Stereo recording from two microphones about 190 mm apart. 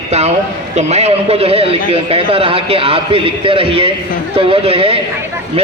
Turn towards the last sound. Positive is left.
turn(degrees=-30)  # may be behind; listen again after turning